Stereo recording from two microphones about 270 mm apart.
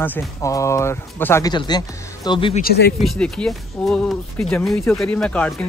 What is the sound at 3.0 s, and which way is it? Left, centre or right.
Speech, centre.